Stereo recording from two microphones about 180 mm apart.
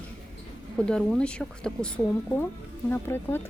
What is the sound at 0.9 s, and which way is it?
Speech, 5° left (ahead or behind).